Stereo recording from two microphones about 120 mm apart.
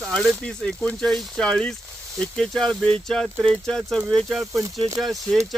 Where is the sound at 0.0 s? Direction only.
Centre (ahead or behind).